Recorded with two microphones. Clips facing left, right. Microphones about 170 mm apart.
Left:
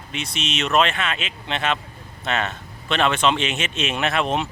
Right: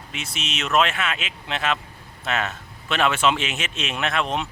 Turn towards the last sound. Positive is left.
turn(degrees=0)  # may be behind; listen again after turning